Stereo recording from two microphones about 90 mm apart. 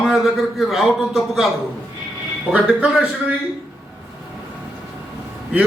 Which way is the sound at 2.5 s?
10° right (ahead or behind).